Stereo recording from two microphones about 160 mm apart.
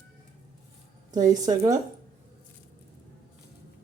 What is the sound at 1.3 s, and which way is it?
Speech, 25° right (ahead or behind).